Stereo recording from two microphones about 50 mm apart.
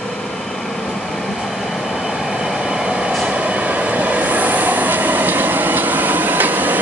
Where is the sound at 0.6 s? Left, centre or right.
Centre.